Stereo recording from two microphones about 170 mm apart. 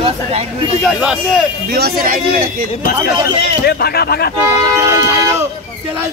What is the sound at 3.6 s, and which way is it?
Speech, 65° left (ahead or behind).